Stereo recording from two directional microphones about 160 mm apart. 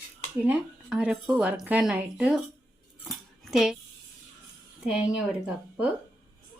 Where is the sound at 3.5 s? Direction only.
5° right (ahead or behind).